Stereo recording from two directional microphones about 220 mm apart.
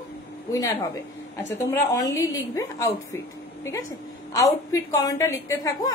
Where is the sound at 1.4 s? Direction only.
15° left (ahead or behind).